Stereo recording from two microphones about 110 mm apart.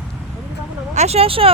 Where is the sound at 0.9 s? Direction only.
75° right (ahead or behind); by 1.5 s 60° right (ahead or behind).